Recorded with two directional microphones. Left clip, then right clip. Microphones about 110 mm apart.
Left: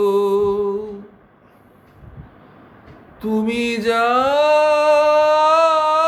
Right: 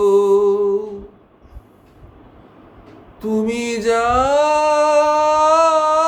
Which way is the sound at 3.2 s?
15° right (ahead or behind).